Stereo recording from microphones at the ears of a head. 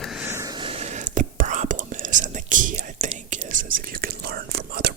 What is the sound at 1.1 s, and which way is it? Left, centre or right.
Whispering, right.